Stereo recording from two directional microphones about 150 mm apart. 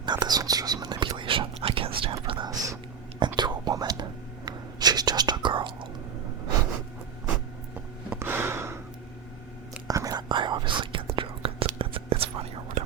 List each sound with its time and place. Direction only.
0.0 s whispering: 30° right (ahead or behind)
8.1 s a sound: 15° right (ahead or behind)
9.8 s whispering: 25° right (ahead or behind); by 12.8 s 40° right (ahead or behind)